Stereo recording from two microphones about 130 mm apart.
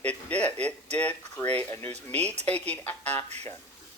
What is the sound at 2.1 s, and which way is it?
A man's voice, 10° left (ahead or behind).